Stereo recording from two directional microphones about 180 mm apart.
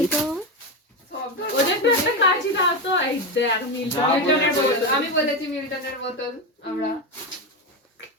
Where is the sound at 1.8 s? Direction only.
80° left.